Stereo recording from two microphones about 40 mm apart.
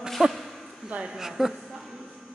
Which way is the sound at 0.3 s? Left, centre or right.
Centre.